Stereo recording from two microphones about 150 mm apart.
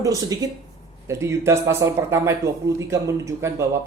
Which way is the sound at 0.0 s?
25° right (ahead or behind).